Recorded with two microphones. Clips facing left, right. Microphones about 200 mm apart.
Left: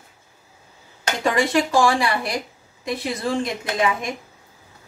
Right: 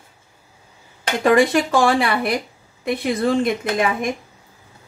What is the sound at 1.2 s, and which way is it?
Speech, 55° right (ahead or behind).